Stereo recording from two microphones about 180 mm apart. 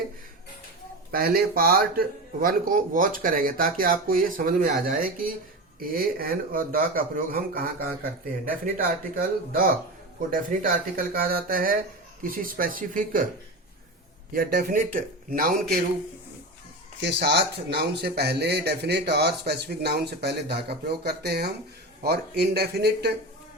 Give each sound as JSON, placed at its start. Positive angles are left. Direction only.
{"t": 1.1, "sound": "speech", "side_deg": -55}
{"t": 14.3, "sound": "speech", "side_deg": -55}
{"t": 17.0, "sound": "a man's voice", "side_deg": -70}